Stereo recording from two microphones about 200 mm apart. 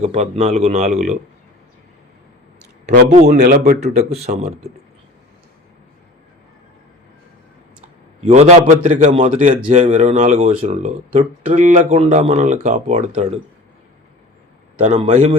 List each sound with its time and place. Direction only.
0.0 s speech: 30° right (ahead or behind)
3.1 s speech: 35° right (ahead or behind)
3.4 s speech: 45° right (ahead or behind)
8.2 s speech: 35° right (ahead or behind)
14.8 s speech: 30° right (ahead or behind)